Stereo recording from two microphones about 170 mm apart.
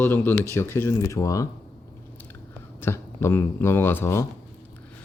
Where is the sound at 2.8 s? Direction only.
15° left (ahead or behind).